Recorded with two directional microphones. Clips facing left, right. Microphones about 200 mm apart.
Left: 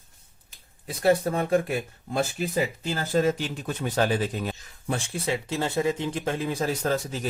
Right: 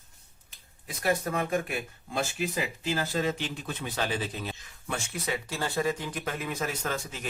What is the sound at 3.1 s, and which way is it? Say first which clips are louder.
Speech: left 6 dB; 45° left (ahead or behind).